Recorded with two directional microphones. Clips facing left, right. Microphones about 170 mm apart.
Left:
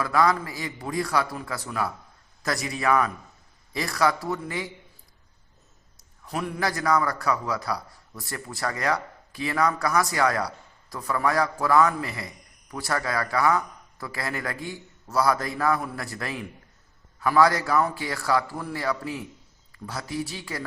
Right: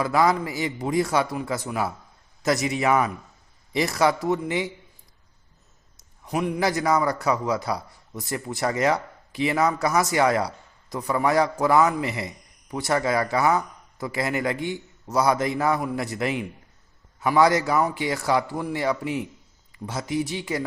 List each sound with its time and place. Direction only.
0.0 s a man's voice: 20° right (ahead or behind)
6.0 s a man's voice: 15° right (ahead or behind)